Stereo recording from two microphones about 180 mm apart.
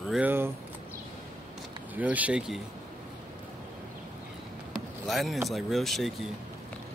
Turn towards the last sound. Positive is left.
turn(degrees=0)  # may be behind; listen again after turning